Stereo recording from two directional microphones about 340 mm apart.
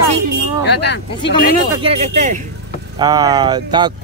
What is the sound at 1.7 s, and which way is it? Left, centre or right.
Speech, centre.